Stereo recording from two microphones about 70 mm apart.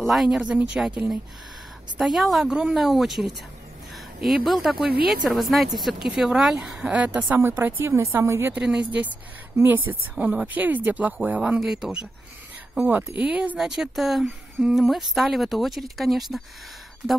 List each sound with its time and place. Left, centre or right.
0.0 s a woman's voice: centre
2.0 s a woman's voice: centre
7.3 s speech: right
8.6 s a woman's voice: centre
9.6 s a woman's voice: right; by 12.1 s centre
12.8 s speech: right
13.6 s a woman's voice: centre